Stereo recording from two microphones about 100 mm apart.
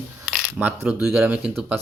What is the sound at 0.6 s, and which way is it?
Speech, 20° right (ahead or behind).